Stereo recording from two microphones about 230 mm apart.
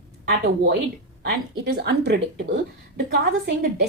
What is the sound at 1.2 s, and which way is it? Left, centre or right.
A woman's voice, right.